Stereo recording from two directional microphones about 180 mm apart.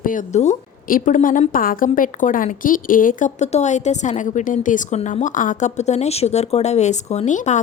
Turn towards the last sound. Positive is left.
turn(degrees=40)  # may be behind; listen again after turning